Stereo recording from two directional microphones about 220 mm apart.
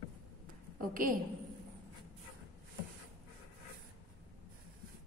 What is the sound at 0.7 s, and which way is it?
Speech, 40° right (ahead or behind).